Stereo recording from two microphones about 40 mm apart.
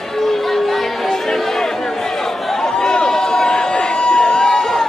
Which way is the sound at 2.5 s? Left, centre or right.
Centre.